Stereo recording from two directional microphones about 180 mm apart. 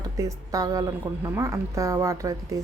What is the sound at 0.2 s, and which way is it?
A woman's voice, 20° right (ahead or behind).